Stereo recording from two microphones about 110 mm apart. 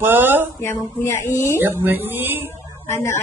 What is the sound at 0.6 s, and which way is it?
Speech, 20° left (ahead or behind).